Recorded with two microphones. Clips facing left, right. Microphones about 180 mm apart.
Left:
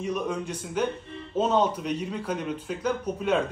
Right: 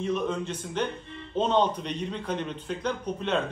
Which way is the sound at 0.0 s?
10° left (ahead or behind).